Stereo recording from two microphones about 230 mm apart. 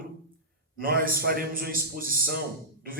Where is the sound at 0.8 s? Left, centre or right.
Right.